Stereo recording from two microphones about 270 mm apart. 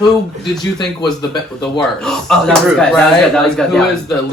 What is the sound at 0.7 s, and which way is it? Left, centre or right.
Speech, centre.